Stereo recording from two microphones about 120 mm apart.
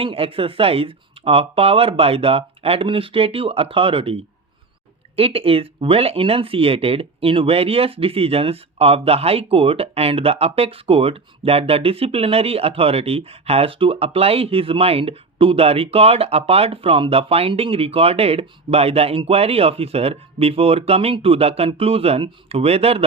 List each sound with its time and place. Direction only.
0.0 s speech: 50° right (ahead or behind)